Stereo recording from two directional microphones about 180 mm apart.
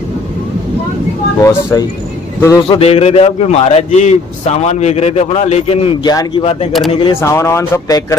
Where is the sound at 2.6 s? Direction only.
35° left (ahead or behind).